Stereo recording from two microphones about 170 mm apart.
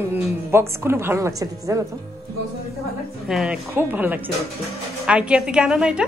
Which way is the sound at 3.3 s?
5° right (ahead or behind).